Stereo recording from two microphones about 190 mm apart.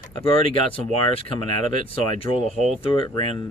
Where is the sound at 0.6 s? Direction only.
30° left (ahead or behind).